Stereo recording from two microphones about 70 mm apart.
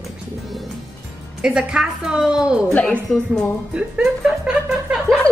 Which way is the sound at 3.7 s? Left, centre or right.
Centre.